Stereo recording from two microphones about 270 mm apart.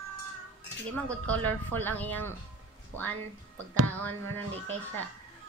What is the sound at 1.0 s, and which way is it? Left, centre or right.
Speech, centre.